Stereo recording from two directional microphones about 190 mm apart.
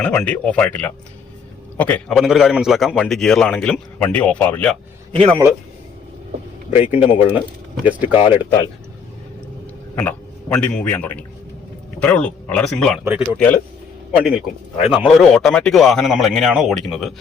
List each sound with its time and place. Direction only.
0.0 s a man's voice: 5° left (ahead or behind)
5.1 s a man's voice: 30° right (ahead or behind)
6.7 s speech: 30° left (ahead or behind)
7.9 s speech: 10° right (ahead or behind)
9.9 s a man's voice: 10° left (ahead or behind)
14.2 s a man's voice: 5° right (ahead or behind)